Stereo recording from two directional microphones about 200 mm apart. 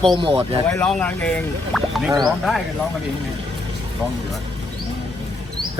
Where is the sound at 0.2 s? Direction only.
25° right (ahead or behind).